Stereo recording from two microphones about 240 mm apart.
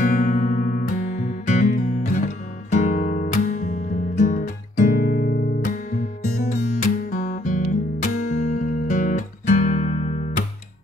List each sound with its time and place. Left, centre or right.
0.0 s music: left